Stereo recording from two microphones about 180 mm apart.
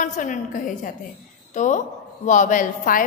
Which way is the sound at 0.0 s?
45° left (ahead or behind).